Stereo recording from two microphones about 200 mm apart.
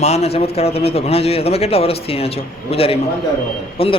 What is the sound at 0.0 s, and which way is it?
Speech, 30° left (ahead or behind).